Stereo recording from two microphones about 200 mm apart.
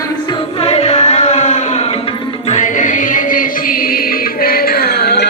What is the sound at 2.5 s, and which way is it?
Music, 40° left (ahead or behind).